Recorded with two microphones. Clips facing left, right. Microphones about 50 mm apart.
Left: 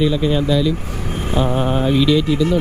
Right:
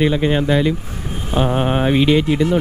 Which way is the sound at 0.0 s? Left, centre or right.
Right.